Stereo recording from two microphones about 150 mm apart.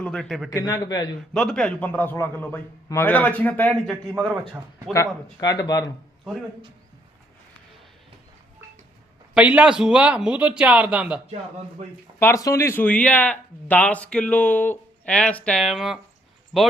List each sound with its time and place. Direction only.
0.0 s a man's voice: 5° left (ahead or behind)
0.5 s a man's voice: 25° left (ahead or behind)
1.3 s speech: 5° left (ahead or behind)
4.3 s speech: 20° right (ahead or behind)
5.4 s a man's voice: 25° left (ahead or behind)
9.3 s speech: 10° right (ahead or behind)
12.2 s a man's voice: 20° left (ahead or behind); by 16.7 s centre (ahead or behind)